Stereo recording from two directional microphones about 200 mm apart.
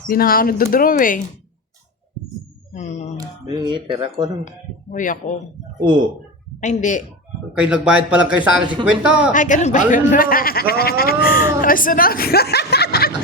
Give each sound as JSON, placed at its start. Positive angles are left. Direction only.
{"t": 0.1, "sound": "speech", "side_deg": 45}
{"t": 2.7, "sound": "speech", "side_deg": 35}
{"t": 3.2, "sound": "speech", "side_deg": -20}
{"t": 4.9, "sound": "speech", "side_deg": 40}
{"t": 5.8, "sound": "speech", "side_deg": -20}
{"t": 6.6, "sound": "speech", "side_deg": 35}
{"t": 7.5, "sound": "speech", "side_deg": -5}
{"t": 9.3, "sound": "speech", "side_deg": 40}